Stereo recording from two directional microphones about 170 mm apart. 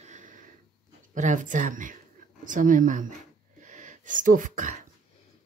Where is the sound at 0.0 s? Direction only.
50° right (ahead or behind).